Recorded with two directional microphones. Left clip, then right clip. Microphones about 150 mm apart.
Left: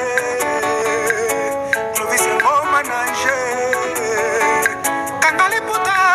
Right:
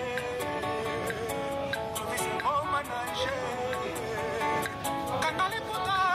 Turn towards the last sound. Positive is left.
turn(degrees=40)  # may be behind; listen again after turning